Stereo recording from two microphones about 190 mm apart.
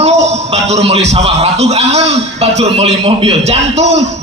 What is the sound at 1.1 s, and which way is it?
A man's voice, 35° right (ahead or behind).